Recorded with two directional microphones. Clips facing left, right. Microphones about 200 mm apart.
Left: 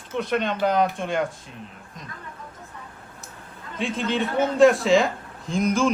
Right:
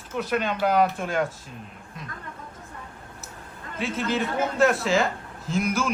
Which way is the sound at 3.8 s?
5° right (ahead or behind).